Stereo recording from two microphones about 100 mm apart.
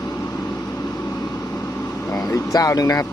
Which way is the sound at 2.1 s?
35° left (ahead or behind).